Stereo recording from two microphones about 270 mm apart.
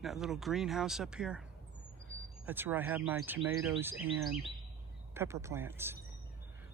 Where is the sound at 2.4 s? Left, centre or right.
Centre.